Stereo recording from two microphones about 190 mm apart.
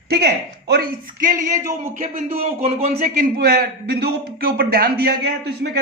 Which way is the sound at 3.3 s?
55° right (ahead or behind).